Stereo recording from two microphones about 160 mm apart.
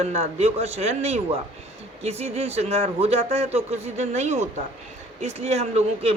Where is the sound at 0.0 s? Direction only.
40° right (ahead or behind).